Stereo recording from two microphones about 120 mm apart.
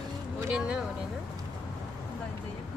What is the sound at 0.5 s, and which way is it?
Speech, 10° right (ahead or behind).